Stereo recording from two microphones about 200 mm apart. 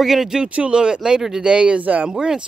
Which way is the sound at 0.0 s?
Centre (ahead or behind).